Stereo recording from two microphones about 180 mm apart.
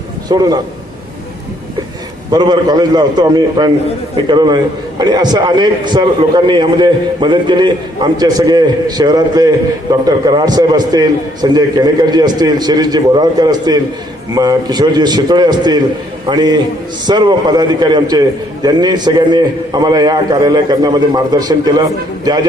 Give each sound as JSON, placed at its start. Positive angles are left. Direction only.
{"t": 0.3, "sound": "a man's voice", "side_deg": -20}
{"t": 2.3, "sound": "a man's voice", "side_deg": -20}